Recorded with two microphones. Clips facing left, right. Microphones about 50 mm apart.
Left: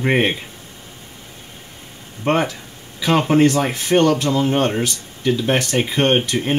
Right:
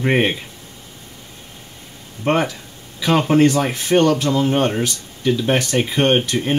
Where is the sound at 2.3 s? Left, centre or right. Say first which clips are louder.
Even; centre.